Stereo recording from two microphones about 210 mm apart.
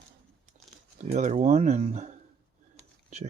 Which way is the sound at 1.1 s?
35° right (ahead or behind).